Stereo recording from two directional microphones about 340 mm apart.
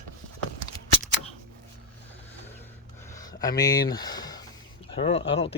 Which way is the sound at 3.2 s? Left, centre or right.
Centre.